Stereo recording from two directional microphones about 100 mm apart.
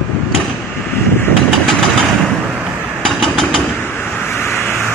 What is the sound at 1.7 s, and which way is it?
Vehicle, centre (ahead or behind).